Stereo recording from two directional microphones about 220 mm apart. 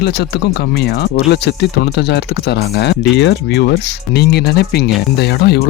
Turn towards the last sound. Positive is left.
turn(degrees=45)  # may be behind; listen again after turning